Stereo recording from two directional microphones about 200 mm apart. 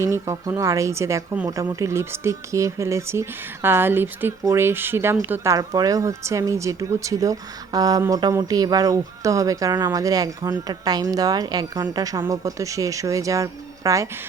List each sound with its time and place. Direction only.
0.0 s speech: 15° right (ahead or behind)